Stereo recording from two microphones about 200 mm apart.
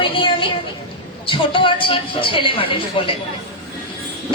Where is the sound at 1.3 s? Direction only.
25° left (ahead or behind).